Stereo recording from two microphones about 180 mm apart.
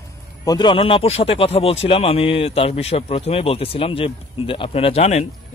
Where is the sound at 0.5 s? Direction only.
25° left (ahead or behind).